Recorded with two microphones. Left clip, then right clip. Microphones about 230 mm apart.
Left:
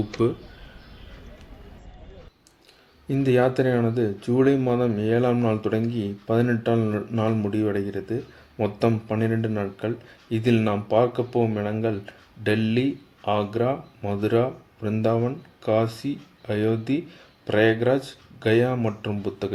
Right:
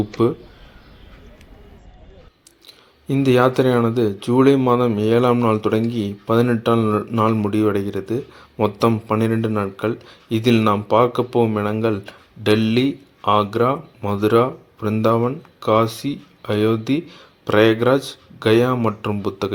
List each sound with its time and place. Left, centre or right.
0.2 s speech: centre
3.1 s speech: centre